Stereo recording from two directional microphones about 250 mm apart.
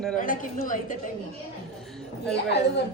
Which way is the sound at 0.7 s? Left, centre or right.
Left.